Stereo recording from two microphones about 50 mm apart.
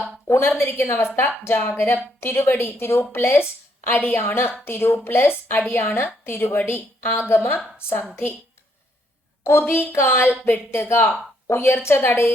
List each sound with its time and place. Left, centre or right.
0.3 s a woman's voice: left
7.8 s a woman's voice: left
9.4 s a woman's voice: left